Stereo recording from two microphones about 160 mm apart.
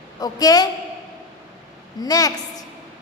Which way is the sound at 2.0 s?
20° left (ahead or behind).